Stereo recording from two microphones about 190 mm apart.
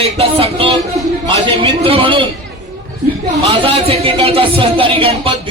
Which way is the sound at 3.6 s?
30° right (ahead or behind).